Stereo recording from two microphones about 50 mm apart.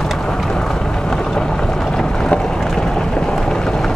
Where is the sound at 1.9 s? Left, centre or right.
Centre.